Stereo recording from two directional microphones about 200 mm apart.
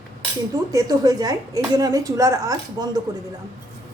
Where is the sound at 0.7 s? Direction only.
20° right (ahead or behind).